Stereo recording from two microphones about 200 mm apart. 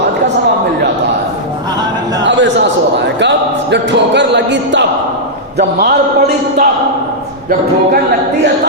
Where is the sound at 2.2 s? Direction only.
65° right (ahead or behind).